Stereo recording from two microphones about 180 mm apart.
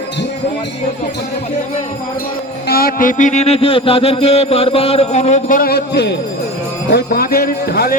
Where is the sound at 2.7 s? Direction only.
55° left (ahead or behind).